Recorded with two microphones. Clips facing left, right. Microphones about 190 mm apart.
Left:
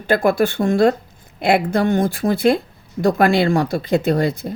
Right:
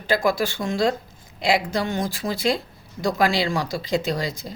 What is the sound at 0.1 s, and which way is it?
A woman's voice, 55° left (ahead or behind).